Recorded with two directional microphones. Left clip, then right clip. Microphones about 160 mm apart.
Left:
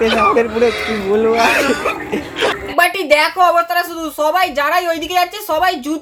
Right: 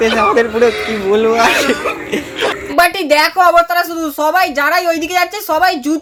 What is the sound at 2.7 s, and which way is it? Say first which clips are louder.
A woman's voice: right 2 dB; 40° right (ahead or behind).